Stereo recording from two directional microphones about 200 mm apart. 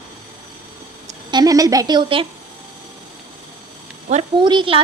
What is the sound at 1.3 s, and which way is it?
Speech, 20° right (ahead or behind).